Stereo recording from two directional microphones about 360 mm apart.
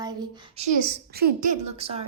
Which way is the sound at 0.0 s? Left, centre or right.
Centre.